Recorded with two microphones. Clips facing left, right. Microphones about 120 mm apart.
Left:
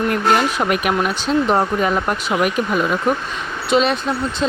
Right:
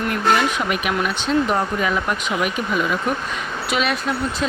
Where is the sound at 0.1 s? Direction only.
45° left (ahead or behind).